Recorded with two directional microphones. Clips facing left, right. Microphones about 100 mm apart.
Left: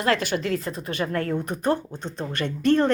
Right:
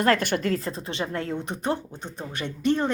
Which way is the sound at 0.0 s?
50° right (ahead or behind).